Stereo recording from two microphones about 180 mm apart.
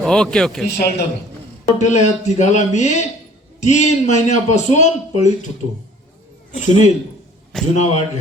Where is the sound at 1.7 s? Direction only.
40° left (ahead or behind).